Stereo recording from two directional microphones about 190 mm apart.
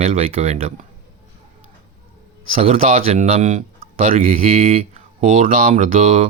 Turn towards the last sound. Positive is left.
turn(degrees=-35)  # may be behind; listen again after turning